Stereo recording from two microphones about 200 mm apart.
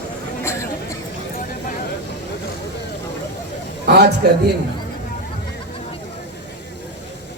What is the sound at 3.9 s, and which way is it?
Speech, 55° right (ahead or behind).